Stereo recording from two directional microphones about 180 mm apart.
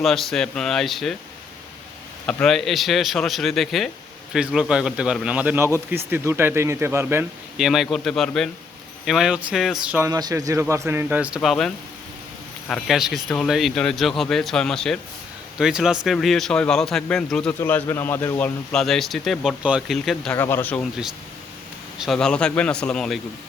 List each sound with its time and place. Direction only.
0.0 s speech: centre (ahead or behind)
2.2 s speech: 5° left (ahead or behind)
10.1 s speech: 20° right (ahead or behind)
11.3 s speech: 5° left (ahead or behind)
20.3 s speech: 10° left (ahead or behind)
20.9 s speech: centre (ahead or behind)